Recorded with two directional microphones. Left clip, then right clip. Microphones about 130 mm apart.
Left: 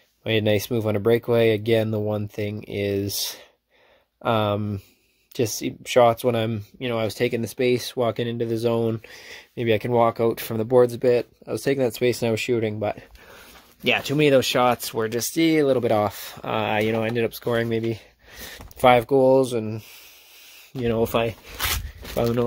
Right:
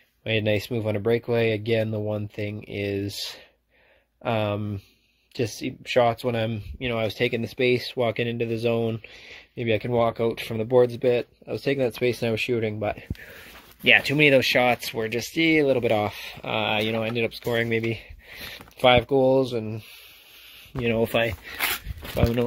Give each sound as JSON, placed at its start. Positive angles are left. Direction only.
{"t": 0.2, "sound": "speech", "side_deg": 40}
{"t": 6.8, "sound": "speech", "side_deg": 25}
{"t": 10.5, "sound": "speech", "side_deg": 35}
{"t": 17.6, "sound": "speech", "side_deg": 30}
{"t": 20.8, "sound": "speech", "side_deg": 35}